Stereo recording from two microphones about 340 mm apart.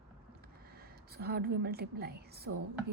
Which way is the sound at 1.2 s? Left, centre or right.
Right.